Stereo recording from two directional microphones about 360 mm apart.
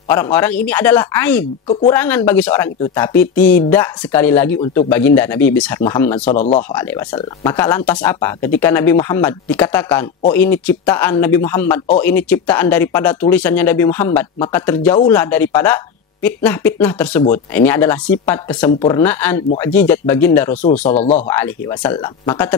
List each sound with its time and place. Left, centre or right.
0.1 s speech: centre
6.3 s speech: centre
6.7 s speech: centre
20.9 s speech: centre
21.3 s speech: centre